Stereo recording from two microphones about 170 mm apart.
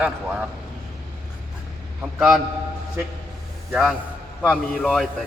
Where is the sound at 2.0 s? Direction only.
5° right (ahead or behind).